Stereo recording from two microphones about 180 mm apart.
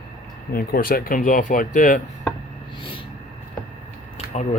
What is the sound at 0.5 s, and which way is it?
Speech, 55° left (ahead or behind).